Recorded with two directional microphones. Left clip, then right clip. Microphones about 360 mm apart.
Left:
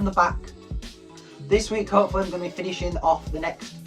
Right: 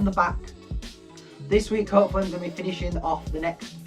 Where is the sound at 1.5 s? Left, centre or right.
Centre.